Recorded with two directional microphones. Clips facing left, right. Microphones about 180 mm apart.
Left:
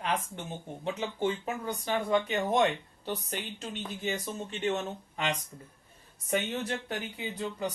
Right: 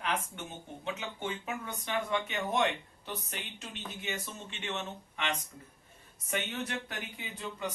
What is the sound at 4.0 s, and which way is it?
Speech, 35° left (ahead or behind).